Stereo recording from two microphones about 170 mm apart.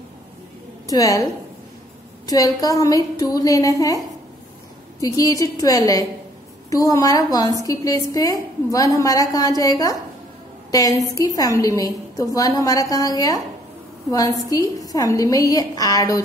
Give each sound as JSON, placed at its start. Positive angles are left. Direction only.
{"t": 0.8, "sound": "a woman's voice", "side_deg": 20}
{"t": 5.0, "sound": "a woman's voice", "side_deg": 20}